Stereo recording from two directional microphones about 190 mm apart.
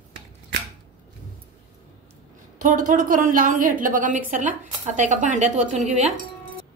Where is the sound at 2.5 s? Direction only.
45° right (ahead or behind).